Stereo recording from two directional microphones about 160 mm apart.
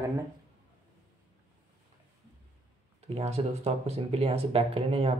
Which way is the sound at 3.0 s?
40° right (ahead or behind).